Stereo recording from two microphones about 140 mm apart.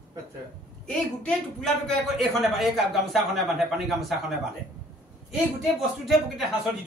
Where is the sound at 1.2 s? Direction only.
5° left (ahead or behind).